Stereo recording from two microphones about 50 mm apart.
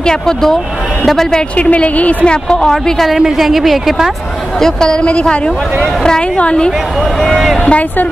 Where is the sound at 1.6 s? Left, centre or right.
Left.